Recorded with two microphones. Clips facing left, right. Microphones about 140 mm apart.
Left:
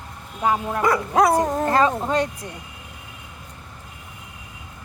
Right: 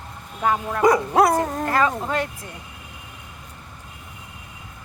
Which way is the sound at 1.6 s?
25° left (ahead or behind).